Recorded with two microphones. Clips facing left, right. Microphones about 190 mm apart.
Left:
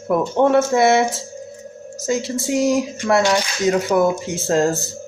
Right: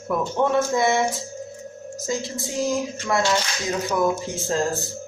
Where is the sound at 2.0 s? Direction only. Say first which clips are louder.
Left 7 dB; 75° left (ahead or behind).